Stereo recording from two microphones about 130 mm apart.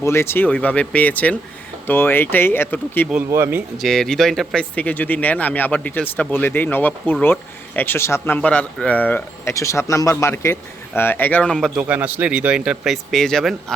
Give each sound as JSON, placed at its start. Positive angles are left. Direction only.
{"t": 0.0, "sound": "speech", "side_deg": 20}
{"t": 3.2, "sound": "speech", "side_deg": -20}
{"t": 3.8, "sound": "speech", "side_deg": 5}
{"t": 11.8, "sound": "speech", "side_deg": -10}